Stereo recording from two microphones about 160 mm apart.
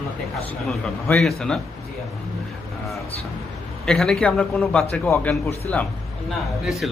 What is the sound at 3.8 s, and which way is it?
A man's voice, 5° left (ahead or behind).